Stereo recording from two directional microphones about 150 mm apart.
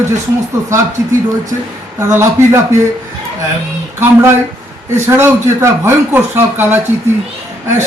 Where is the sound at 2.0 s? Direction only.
15° right (ahead or behind).